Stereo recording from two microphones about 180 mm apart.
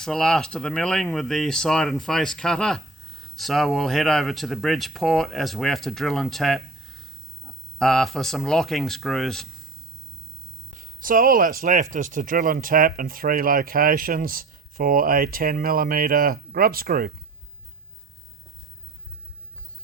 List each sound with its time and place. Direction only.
0.0 s speech: centre (ahead or behind)
10.8 s speech: 50° right (ahead or behind)